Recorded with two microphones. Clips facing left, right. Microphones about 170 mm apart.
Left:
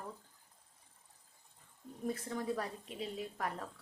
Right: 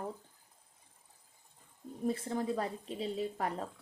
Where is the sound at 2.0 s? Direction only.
30° right (ahead or behind).